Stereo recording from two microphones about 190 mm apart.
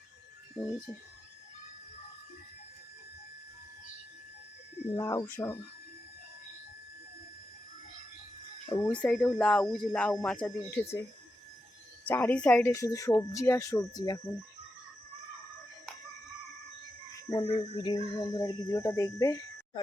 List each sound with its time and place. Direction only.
4.9 s speech: 20° left (ahead or behind)
8.7 s speech: 10° left (ahead or behind)
12.0 s speech: 10° left (ahead or behind)
12.7 s speech: 15° left (ahead or behind)
17.4 s speech: 25° left (ahead or behind)